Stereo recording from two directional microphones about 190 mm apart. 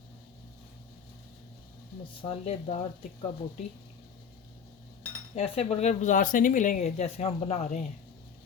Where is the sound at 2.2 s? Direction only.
30° left (ahead or behind).